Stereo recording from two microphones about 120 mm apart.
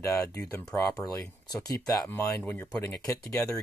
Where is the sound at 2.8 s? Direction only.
25° left (ahead or behind).